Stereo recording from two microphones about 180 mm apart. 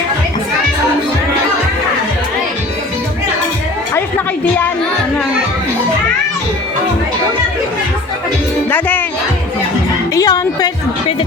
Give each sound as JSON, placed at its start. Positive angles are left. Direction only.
{"t": 8.7, "sound": "music", "side_deg": 10}
{"t": 10.2, "sound": "music", "side_deg": 20}